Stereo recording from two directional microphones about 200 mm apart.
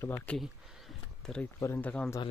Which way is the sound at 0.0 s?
10° left (ahead or behind).